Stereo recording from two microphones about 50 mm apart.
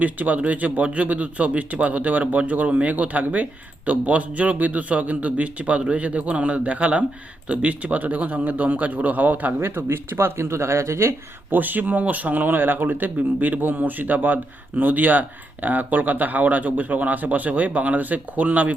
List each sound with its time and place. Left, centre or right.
0.0 s a man's voice: right
9.6 s speech: right
11.5 s speech: right